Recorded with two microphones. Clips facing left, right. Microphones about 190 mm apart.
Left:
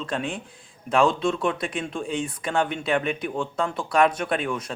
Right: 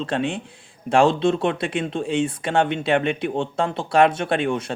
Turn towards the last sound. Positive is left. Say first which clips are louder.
# right 4 dB
turn(degrees=-25)  # may be behind; listen again after turning